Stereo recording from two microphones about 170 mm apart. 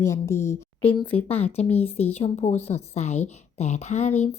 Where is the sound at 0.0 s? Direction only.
15° left (ahead or behind).